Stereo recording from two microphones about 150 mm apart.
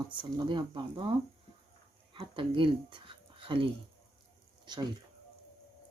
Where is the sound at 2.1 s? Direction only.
35° right (ahead or behind).